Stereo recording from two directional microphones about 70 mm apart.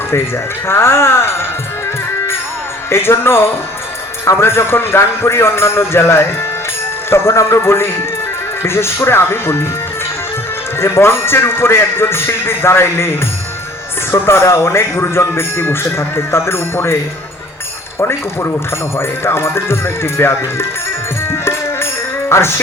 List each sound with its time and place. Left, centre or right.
0.7 s music: left
2.9 s a man's voice: left
10.8 s a man's voice: left
18.9 s a man's voice: left
21.2 s music: left